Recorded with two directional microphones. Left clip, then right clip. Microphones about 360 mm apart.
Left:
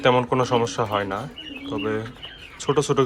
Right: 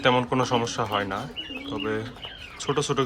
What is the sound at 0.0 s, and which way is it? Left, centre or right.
Speech, centre.